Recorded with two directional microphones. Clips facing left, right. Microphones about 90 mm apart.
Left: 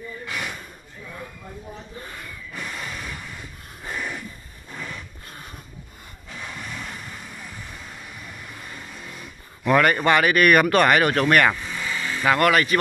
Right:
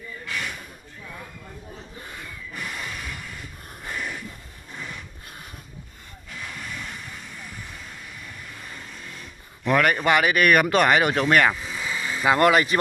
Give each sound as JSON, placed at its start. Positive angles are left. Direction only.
{"t": 0.3, "sound": "gasp", "side_deg": 20}
{"t": 9.6, "sound": "speech", "side_deg": 0}
{"t": 10.0, "sound": "speech", "side_deg": -10}
{"t": 12.4, "sound": "a man's voice", "side_deg": -20}